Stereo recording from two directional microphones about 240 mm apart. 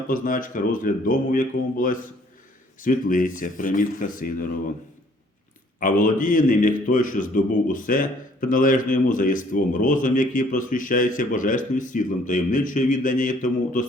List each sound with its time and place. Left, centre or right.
0.1 s a man's voice: left
5.8 s a man's voice: left